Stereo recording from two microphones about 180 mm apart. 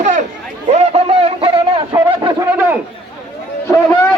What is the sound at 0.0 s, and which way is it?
Chatter, 45° right (ahead or behind).